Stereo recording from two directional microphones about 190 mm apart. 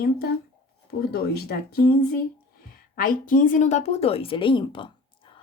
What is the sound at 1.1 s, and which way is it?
Speech, 55° left (ahead or behind).